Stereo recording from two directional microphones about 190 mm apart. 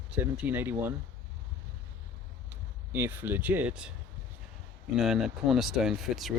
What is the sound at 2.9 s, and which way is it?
Speech, 10° right (ahead or behind).